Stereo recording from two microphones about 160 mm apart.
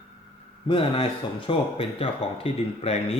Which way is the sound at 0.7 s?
35° left (ahead or behind).